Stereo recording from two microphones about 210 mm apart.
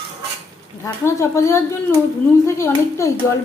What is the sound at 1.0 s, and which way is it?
A woman's voice, 15° left (ahead or behind).